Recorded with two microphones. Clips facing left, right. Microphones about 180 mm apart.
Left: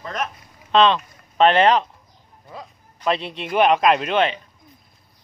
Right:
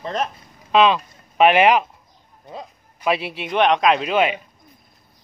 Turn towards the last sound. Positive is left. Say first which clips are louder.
# right 1 dB
turn(degrees=-5)  # may be behind; listen again after turning